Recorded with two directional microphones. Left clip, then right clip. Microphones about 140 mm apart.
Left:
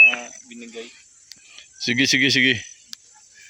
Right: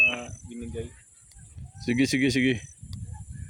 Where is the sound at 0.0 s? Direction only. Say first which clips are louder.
Left 9 dB; 15° right (ahead or behind).